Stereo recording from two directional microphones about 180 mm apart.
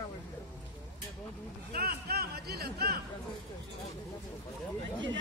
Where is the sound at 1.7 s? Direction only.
55° right (ahead or behind).